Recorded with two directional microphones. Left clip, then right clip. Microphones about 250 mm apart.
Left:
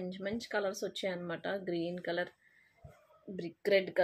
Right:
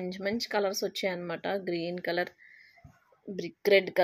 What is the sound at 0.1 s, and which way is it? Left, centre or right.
Speech, right.